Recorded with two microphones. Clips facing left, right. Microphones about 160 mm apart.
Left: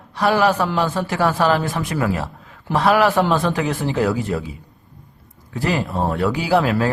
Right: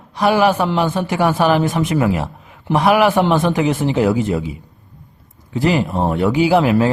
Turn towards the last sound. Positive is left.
turn(degrees=-20)  # may be behind; listen again after turning